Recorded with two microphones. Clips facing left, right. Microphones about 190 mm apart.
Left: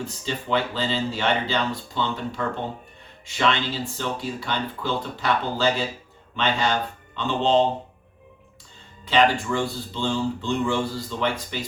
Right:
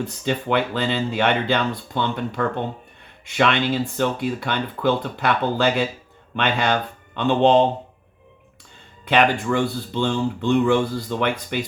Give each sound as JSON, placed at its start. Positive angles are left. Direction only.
{"t": 0.0, "sound": "speech", "side_deg": -60}
{"t": 9.0, "sound": "speech", "side_deg": -60}